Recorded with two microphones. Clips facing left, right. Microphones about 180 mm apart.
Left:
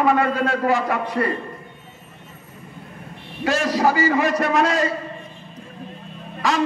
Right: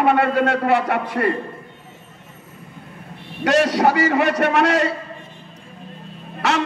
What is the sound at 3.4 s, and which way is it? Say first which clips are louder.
A man's voice: right 3 dB; 70° right (ahead or behind).